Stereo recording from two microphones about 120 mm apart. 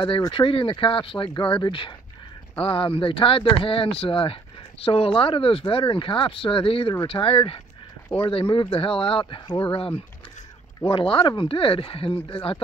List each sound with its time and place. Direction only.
0.3 s speech: 50° left (ahead or behind)